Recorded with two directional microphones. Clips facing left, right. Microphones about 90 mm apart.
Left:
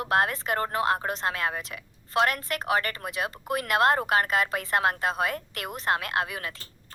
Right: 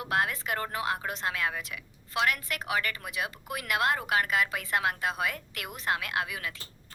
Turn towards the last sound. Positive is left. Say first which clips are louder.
# left 3 dB
turn(degrees=45)  # may be behind; listen again after turning